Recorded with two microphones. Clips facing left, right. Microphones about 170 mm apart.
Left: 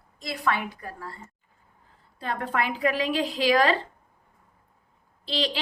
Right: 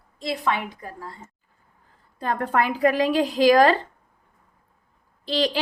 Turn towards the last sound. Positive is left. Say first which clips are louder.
# right 5 dB
turn(degrees=-45)  # may be behind; listen again after turning